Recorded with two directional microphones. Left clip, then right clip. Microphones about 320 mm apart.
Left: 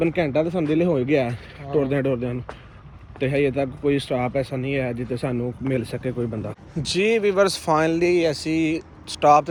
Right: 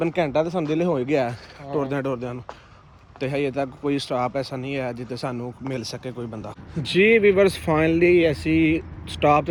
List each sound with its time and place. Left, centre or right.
0.0 s speech: centre
6.8 s speech: centre